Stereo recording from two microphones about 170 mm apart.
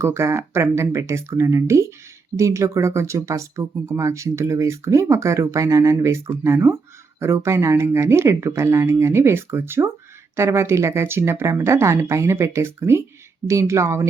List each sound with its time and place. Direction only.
0.0 s speech: 15° right (ahead or behind)